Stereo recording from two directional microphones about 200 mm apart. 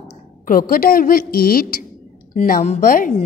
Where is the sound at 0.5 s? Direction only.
45° left (ahead or behind).